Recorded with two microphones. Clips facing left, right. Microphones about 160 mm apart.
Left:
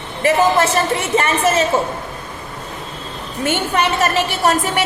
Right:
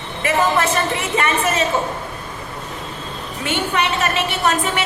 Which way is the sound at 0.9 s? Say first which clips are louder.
Left 2 dB; 35° left (ahead or behind).